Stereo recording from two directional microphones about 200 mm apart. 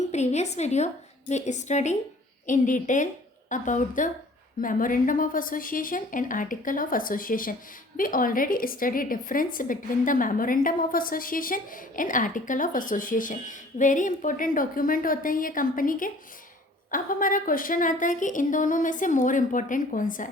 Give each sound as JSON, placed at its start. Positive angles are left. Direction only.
{"t": 0.1, "sound": "a woman's voice", "side_deg": 35}